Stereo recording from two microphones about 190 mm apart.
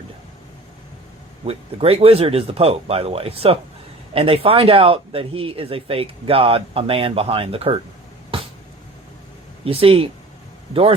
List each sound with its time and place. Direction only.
1.5 s speech: 30° right (ahead or behind)
9.6 s speech: 30° right (ahead or behind)